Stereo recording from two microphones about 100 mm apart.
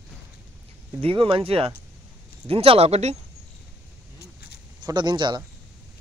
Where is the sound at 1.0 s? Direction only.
65° right (ahead or behind); by 3.1 s 90° right.